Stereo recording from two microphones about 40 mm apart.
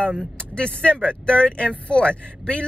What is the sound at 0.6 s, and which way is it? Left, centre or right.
Speech, left.